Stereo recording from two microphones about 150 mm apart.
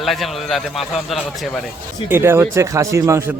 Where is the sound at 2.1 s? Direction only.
15° right (ahead or behind).